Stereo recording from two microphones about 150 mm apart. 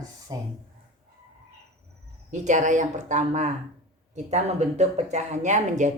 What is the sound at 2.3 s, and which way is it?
Speech, 55° right (ahead or behind).